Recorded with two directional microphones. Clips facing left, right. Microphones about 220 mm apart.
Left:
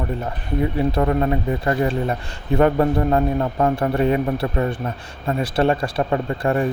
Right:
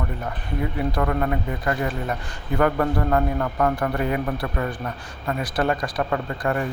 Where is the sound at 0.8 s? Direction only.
25° left (ahead or behind).